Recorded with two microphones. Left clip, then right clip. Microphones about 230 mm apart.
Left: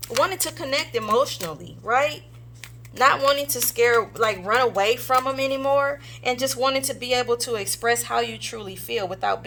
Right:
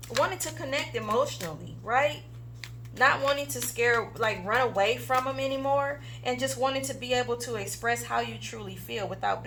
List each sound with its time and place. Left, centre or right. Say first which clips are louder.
0.2 s speech: left 5 dB; left